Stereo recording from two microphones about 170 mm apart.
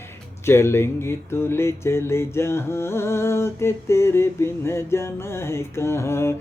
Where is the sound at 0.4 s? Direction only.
15° left (ahead or behind).